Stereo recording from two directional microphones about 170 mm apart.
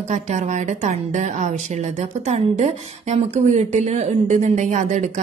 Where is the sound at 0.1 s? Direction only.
45° right (ahead or behind).